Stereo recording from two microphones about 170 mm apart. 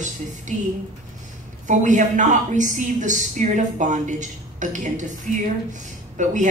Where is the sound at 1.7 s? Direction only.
45° right (ahead or behind).